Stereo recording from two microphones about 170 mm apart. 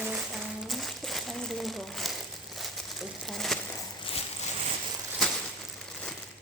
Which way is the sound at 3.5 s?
Centre (ahead or behind).